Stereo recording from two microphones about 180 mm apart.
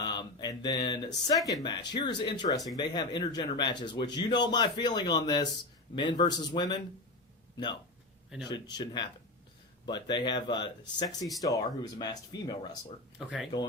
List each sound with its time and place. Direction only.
0.0 s speech: 25° left (ahead or behind)
8.4 s speech: 25° left (ahead or behind)
13.1 s speech: centre (ahead or behind)